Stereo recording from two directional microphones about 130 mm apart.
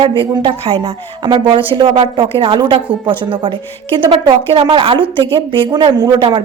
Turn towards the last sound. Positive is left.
turn(degrees=-35)  # may be behind; listen again after turning